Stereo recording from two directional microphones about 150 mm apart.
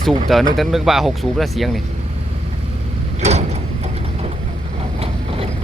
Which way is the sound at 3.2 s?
50° right (ahead or behind).